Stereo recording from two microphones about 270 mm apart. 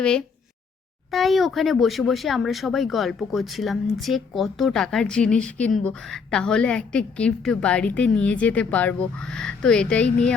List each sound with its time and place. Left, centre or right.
0.0 s speech: centre